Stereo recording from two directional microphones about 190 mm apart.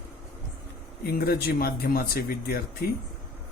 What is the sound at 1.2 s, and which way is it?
Speech, 50° left (ahead or behind).